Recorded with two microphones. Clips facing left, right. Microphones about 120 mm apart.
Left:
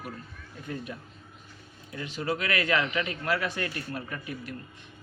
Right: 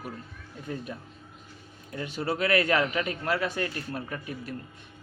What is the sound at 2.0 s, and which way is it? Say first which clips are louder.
Speech: right 2 dB; 35° right (ahead or behind).